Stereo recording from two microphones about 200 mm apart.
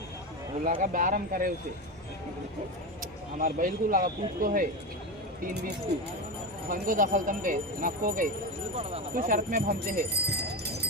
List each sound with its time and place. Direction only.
0.6 s speech: 45° right (ahead or behind)
3.4 s speech: 45° right (ahead or behind)